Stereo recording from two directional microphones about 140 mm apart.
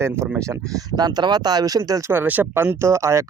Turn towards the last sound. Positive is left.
turn(degrees=-20)  # may be behind; listen again after turning